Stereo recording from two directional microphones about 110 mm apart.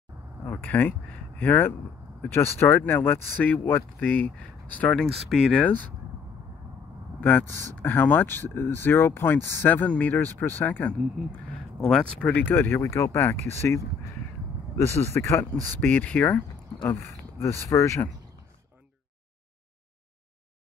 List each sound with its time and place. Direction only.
0.5 s speech: 15° left (ahead or behind)
7.2 s speech: 15° left (ahead or behind)
15.1 s speech: 25° left (ahead or behind)
17.4 s speech: 25° left (ahead or behind)